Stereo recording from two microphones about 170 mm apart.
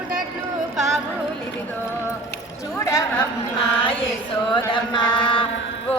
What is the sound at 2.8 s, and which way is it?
Speech, 20° left (ahead or behind).